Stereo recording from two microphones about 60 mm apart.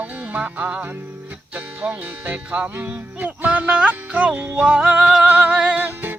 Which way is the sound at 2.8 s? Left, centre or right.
Right.